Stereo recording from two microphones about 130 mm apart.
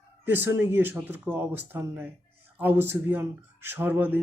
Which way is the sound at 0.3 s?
15° right (ahead or behind).